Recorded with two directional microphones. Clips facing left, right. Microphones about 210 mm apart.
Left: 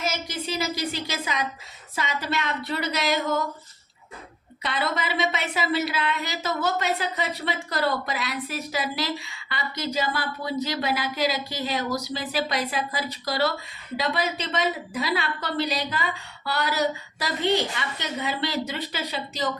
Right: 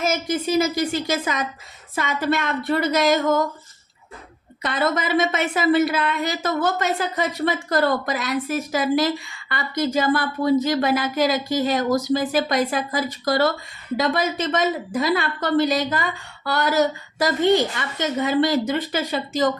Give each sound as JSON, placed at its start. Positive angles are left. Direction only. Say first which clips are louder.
{"t": 0.0, "sound": "a woman's voice", "louder": "right 7 dB", "side_deg": -50}
{"t": 4.6, "sound": "a woman's voice", "louder": "right 5 dB", "side_deg": -45}